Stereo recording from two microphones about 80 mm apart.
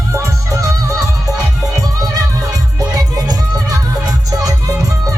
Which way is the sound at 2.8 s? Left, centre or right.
Right.